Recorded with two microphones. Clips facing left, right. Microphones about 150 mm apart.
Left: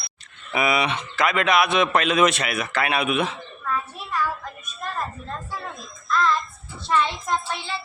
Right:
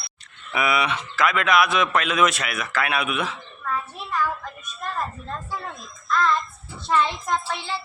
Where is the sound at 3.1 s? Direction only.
30° left (ahead or behind).